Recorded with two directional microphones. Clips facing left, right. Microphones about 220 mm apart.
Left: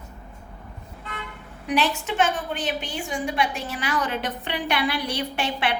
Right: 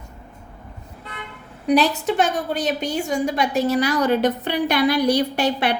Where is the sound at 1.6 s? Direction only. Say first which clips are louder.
Right 7 dB; 35° right (ahead or behind).